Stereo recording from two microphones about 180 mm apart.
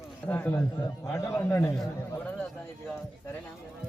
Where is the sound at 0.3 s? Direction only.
10° left (ahead or behind).